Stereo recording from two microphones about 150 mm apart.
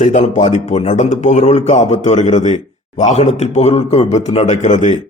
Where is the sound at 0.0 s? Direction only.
55° left (ahead or behind).